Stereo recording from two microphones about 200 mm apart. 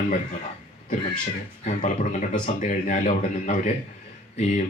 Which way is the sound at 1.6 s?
35° left (ahead or behind).